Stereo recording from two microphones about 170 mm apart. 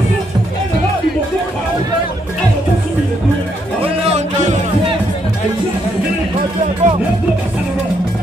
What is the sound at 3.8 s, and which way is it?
Music, 40° right (ahead or behind).